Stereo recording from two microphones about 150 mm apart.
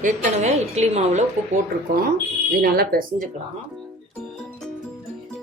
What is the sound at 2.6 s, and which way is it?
Speech, 90° right.